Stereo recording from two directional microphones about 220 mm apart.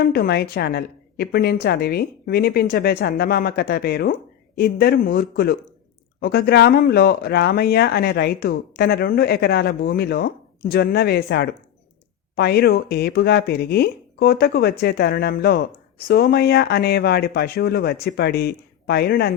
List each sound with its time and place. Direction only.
0.0 s speech: 45° left (ahead or behind)